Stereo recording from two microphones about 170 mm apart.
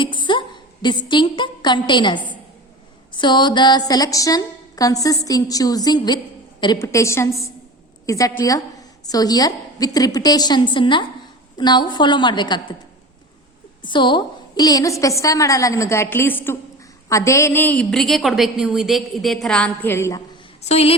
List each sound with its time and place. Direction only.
0.0 s a woman's voice: 30° left (ahead or behind)
13.9 s a woman's voice: 30° left (ahead or behind)
20.6 s a woman's voice: 40° left (ahead or behind)